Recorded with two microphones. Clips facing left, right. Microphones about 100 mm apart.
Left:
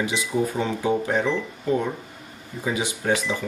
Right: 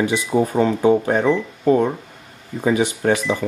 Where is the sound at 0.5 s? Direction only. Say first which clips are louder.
Right 8 dB; 50° right (ahead or behind).